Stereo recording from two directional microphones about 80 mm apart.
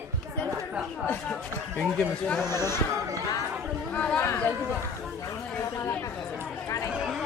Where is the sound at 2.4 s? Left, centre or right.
Left.